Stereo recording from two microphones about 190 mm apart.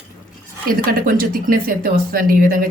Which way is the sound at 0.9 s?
50° right (ahead or behind).